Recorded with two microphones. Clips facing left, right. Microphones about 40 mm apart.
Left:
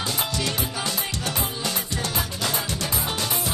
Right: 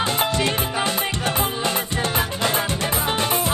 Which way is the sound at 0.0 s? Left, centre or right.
Right.